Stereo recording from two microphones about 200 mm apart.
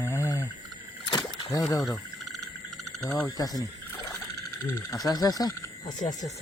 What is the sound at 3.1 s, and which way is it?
Speech, 10° left (ahead or behind).